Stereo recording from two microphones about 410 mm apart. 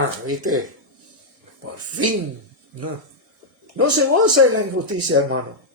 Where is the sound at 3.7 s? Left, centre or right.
Right.